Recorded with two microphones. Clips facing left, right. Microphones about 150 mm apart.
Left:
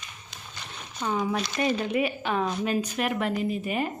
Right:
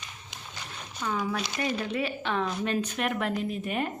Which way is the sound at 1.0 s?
20° left (ahead or behind).